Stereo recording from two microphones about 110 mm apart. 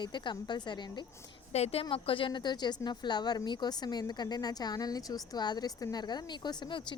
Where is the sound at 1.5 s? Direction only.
70° left (ahead or behind).